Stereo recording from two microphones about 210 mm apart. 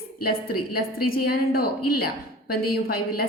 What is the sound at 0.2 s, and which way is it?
A woman's voice, 45° left (ahead or behind).